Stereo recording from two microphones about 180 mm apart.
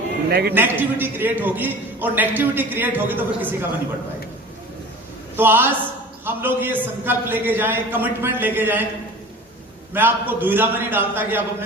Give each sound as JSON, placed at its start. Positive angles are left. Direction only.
{"t": 0.3, "sound": "a man's voice", "side_deg": -60}
{"t": 0.5, "sound": "a man's voice", "side_deg": -10}
{"t": 5.4, "sound": "a man's voice", "side_deg": -10}
{"t": 9.9, "sound": "a man's voice", "side_deg": -10}